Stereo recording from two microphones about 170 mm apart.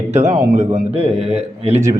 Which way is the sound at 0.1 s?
45° right (ahead or behind).